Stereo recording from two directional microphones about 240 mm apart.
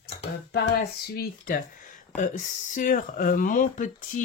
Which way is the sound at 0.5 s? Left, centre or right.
Left.